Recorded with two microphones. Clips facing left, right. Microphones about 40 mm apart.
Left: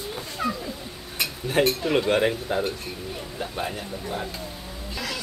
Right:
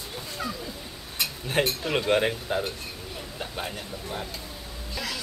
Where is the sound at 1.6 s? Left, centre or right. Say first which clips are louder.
Left 4 dB; centre.